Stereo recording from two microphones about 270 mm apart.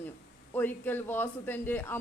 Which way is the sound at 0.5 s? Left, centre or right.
Centre.